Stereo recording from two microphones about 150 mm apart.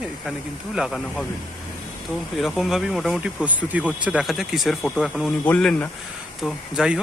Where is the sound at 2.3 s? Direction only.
Centre (ahead or behind).